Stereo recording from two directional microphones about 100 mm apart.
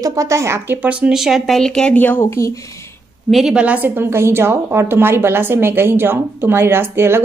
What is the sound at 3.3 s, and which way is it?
A woman's voice, 5° right (ahead or behind).